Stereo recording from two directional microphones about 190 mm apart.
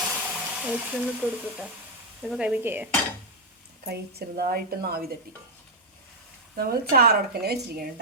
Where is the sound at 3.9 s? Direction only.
55° right (ahead or behind).